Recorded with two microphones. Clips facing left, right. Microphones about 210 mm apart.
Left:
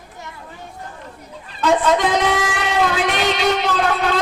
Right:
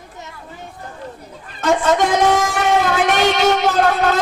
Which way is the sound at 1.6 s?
45° right (ahead or behind).